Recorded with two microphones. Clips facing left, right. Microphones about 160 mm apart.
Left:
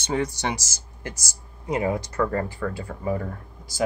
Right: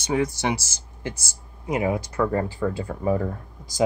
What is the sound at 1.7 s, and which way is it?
Speech, 15° right (ahead or behind).